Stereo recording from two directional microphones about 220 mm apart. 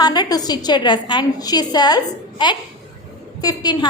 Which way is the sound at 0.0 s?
20° left (ahead or behind).